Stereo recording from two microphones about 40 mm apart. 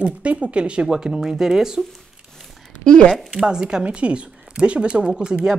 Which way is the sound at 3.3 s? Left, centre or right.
Centre.